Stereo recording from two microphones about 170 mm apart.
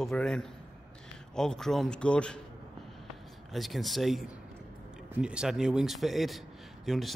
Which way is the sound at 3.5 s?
Centre (ahead or behind).